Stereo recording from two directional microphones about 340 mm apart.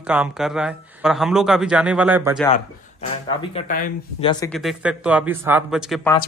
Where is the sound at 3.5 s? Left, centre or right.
Left.